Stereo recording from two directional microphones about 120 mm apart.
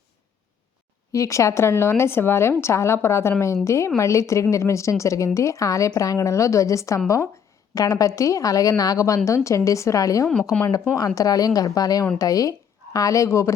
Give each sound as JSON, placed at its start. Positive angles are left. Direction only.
{"t": 1.1, "sound": "a woman's voice", "side_deg": 25}